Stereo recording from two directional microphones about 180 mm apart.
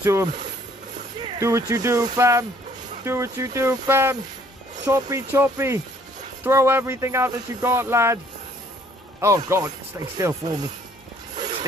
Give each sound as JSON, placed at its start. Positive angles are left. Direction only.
{"t": 0.0, "sound": "speech", "side_deg": -15}
{"t": 9.2, "sound": "speech", "side_deg": -15}
{"t": 11.3, "sound": "vehicle", "side_deg": -25}